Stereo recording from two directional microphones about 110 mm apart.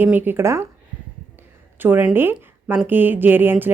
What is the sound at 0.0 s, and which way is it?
Speech, 15° right (ahead or behind).